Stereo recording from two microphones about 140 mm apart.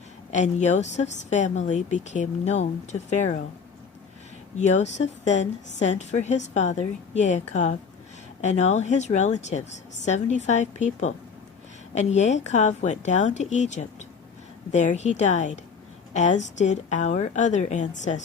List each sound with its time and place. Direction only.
0.3 s a woman's voice: 55° left (ahead or behind)
4.5 s a woman's voice: 55° left (ahead or behind)